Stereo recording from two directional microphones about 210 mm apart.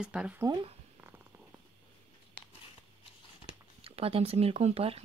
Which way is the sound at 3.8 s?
25° right (ahead or behind).